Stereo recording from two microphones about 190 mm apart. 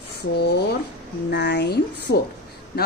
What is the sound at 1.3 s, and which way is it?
A woman's voice, 65° left (ahead or behind).